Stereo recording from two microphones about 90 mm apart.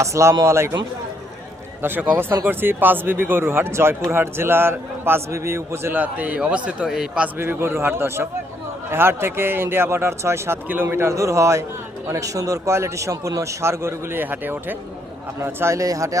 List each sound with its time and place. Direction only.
0.0 s a man's voice: 35° right (ahead or behind)
1.8 s speech: 20° right (ahead or behind)
6.0 s a man's voice: 15° right (ahead or behind)
7.3 s a man's voice: 25° right (ahead or behind)